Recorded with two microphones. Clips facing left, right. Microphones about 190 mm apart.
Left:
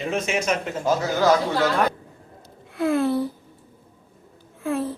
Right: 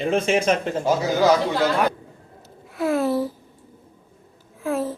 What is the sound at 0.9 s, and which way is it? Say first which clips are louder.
Speech: right 1 dB; 15° right (ahead or behind).